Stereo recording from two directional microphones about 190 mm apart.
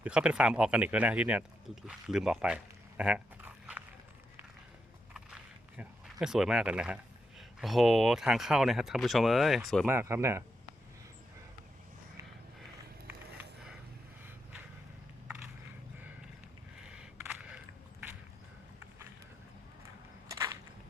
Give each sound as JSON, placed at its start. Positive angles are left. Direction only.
{"t": 0.0, "sound": "speech", "side_deg": -5}
{"t": 3.0, "sound": "dog", "side_deg": -5}
{"t": 5.1, "sound": "speech", "side_deg": -5}
{"t": 9.8, "sound": "speech", "side_deg": -10}
{"t": 13.1, "sound": "a sound", "side_deg": -10}
{"t": 16.9, "sound": "crushing", "side_deg": -5}
{"t": 20.3, "sound": "whip", "side_deg": -15}